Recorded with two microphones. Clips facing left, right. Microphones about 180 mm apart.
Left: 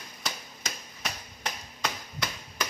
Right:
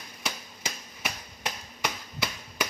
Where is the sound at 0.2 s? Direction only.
10° right (ahead or behind).